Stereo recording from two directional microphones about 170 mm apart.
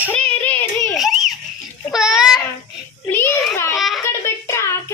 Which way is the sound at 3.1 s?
10° left (ahead or behind).